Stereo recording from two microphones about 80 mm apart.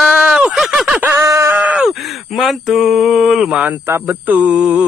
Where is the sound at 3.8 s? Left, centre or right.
Right.